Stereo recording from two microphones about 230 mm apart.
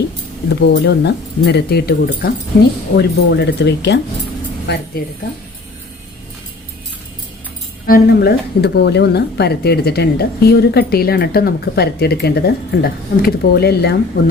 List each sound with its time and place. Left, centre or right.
0.6 s speech: left
7.9 s speech: left